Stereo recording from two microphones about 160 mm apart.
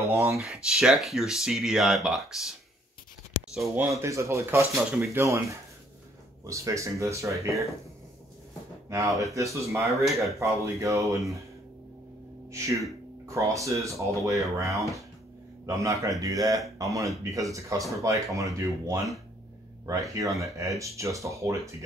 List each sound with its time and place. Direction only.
0.0 s speech: 20° right (ahead or behind)
0.4 s speech: 5° right (ahead or behind)
3.6 s speech: 15° right (ahead or behind)
6.4 s speech: 20° right (ahead or behind)
8.8 s speech: 20° right (ahead or behind)
10.0 s speech: centre (ahead or behind)
10.4 s speech: 20° right (ahead or behind)
12.4 s a sound: 20° right (ahead or behind)
13.3 s speech: 20° right (ahead or behind)
15.6 s speech: 20° right (ahead or behind)